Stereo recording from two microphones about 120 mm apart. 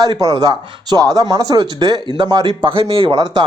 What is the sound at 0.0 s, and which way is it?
Speech, 30° right (ahead or behind).